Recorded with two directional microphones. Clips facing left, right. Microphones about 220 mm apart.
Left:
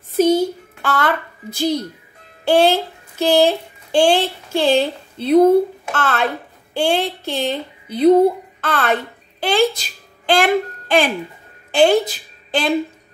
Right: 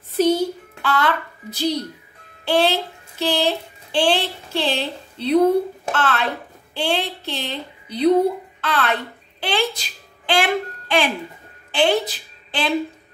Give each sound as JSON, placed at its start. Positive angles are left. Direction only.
{"t": 0.8, "sound": "a child's voice", "side_deg": 45}